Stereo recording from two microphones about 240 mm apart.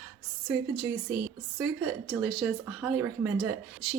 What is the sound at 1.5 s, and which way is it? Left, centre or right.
A woman's voice, centre.